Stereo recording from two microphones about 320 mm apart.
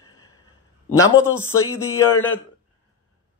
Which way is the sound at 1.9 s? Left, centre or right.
Centre.